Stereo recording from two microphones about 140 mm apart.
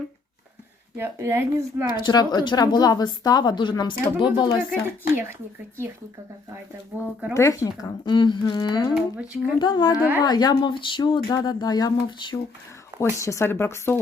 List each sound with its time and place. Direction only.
0.9 s speech: 15° right (ahead or behind)
2.0 s a woman's voice: 30° left (ahead or behind)
7.3 s a woman's voice: 20° left (ahead or behind)
9.0 s speech: 10° right (ahead or behind)
9.6 s a woman's voice: 30° left (ahead or behind)
10.0 s speech: 15° right (ahead or behind)
10.2 s a woman's voice: 30° left (ahead or behind)
13.0 s speech: 20° left (ahead or behind)